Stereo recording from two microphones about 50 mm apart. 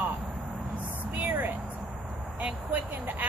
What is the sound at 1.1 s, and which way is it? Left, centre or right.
Speech, right.